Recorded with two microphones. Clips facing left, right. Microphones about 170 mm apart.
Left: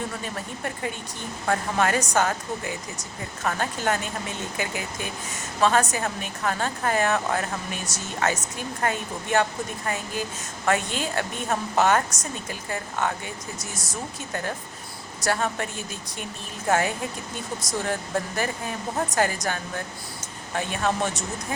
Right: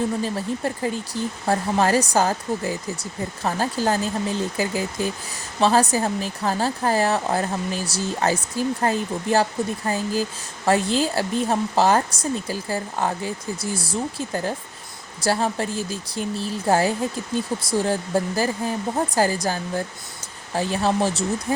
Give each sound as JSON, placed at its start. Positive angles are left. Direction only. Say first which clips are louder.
{"t": 0.2, "sound": "speech", "louder": "right 8 dB", "side_deg": -30}